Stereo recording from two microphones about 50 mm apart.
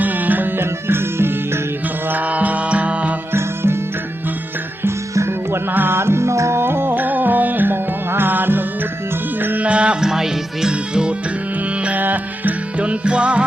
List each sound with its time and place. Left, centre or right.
0.0 s music: right
2.0 s music: right
3.3 s music: right
5.7 s music: right
6.0 s music: right
6.6 s music: right
6.9 s music: right
9.6 s music: right
11.8 s music: right